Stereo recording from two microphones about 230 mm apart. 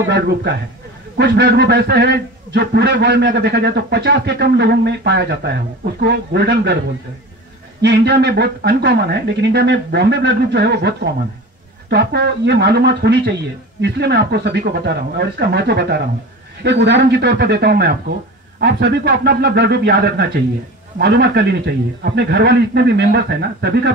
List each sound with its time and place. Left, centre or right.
0.1 s a man's voice: right
7.8 s a man's voice: right